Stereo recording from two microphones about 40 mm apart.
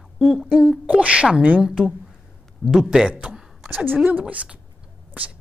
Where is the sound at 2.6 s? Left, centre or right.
Left.